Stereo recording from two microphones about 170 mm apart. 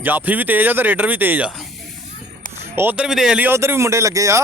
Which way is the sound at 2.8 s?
10° right (ahead or behind).